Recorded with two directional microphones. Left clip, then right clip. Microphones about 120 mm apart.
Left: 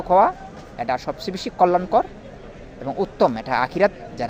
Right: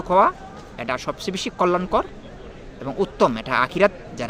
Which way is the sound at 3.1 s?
25° right (ahead or behind).